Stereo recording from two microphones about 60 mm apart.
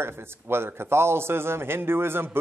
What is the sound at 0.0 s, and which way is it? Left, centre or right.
A man's voice, right.